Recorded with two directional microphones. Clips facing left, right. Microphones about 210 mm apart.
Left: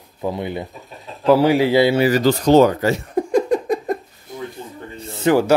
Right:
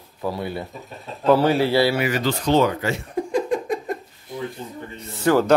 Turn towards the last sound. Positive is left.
turn(degrees=15)  # may be behind; listen again after turning